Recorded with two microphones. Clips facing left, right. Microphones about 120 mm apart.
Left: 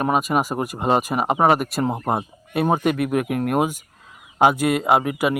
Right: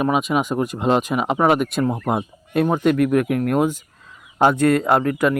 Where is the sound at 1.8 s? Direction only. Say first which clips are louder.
Right 2 dB; 30° left (ahead or behind).